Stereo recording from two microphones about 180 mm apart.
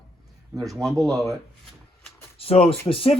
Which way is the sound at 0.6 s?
Centre (ahead or behind).